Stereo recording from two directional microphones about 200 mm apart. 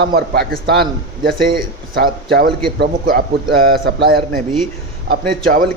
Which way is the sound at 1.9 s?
50° right (ahead or behind).